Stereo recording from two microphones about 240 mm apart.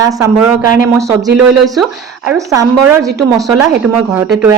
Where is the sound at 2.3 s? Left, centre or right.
Centre.